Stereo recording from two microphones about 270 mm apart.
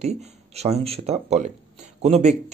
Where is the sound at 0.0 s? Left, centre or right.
Right.